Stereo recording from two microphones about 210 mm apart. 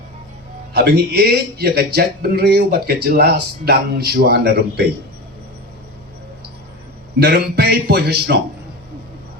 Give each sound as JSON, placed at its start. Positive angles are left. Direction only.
{"t": 0.7, "sound": "a man's voice", "side_deg": -50}
{"t": 7.2, "sound": "a man's voice", "side_deg": -50}